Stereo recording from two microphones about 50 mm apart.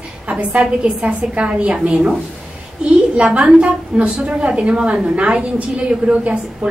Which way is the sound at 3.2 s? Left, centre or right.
Right.